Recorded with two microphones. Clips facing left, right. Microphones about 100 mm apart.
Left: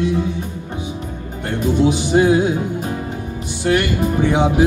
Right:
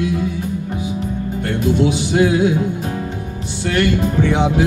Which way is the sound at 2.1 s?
25° left (ahead or behind).